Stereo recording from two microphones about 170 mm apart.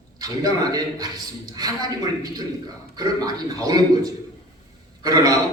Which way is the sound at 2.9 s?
25° right (ahead or behind).